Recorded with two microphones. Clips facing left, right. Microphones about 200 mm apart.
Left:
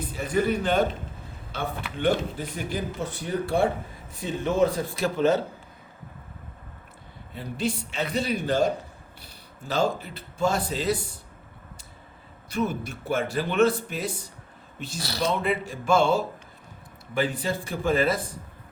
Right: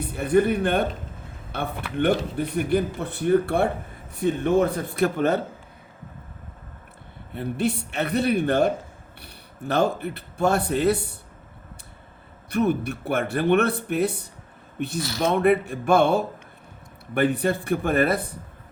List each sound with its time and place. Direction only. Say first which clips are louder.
0.0 s speech: right 5 dB; 60° right (ahead or behind)
7.3 s speech: right 4 dB; 60° right (ahead or behind)
12.5 s speech: right 5 dB; 60° right (ahead or behind)